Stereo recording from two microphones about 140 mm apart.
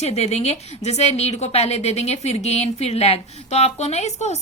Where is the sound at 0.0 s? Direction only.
50° left (ahead or behind).